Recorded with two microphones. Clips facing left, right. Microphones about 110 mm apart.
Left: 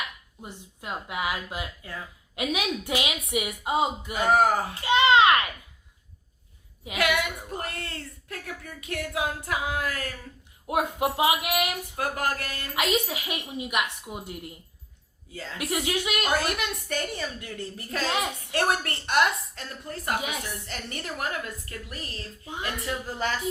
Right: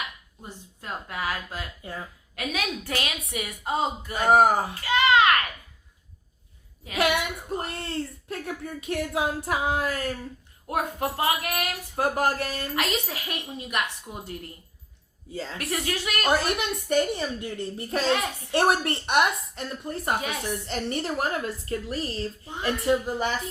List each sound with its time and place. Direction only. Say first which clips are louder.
0.4 s a woman's voice: left 1 dB; 15° left (ahead or behind)
1.8 s a woman's voice: right 2 dB; 30° right (ahead or behind)
2.3 s a woman's voice: left 2 dB; 20° left (ahead or behind)
4.3 s a woman's voice: right 3 dB; 20° right (ahead or behind)
4.7 s a sound: left 1 dB; 25° left (ahead or behind)
6.9 s a woman's voice: right 1 dB; 25° right (ahead or behind)
10.7 s a woman's voice: left 2 dB; 15° left (ahead or behind)
11.9 s a woman's voice: right 5 dB; 30° right (ahead or behind)
12.7 s a woman's voice: left 5 dB; 10° left (ahead or behind)
15.3 s a woman's voice: right 5 dB; 25° right (ahead or behind)
15.5 s a woman's voice: left 3 dB; 15° left (ahead or behind)
16.4 s a woman's voice: right 2 dB; 25° right (ahead or behind)